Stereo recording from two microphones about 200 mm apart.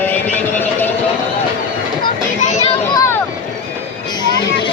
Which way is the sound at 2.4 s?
35° left (ahead or behind).